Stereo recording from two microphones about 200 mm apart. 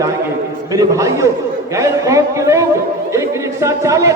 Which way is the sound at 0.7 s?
15° right (ahead or behind).